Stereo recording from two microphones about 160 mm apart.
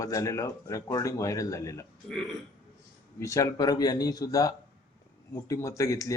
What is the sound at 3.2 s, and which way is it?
Speech, 20° left (ahead or behind).